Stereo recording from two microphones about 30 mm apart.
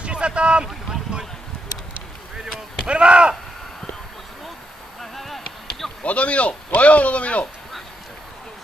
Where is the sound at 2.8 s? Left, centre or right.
Right.